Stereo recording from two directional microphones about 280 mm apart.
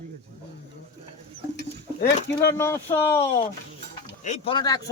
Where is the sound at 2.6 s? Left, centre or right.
Centre.